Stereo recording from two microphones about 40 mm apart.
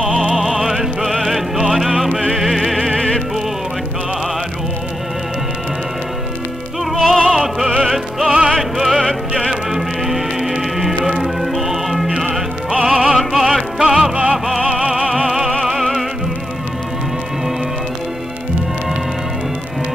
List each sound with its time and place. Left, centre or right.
0.0 s music: centre
6.8 s music: centre
14.1 s music: right
14.7 s music: centre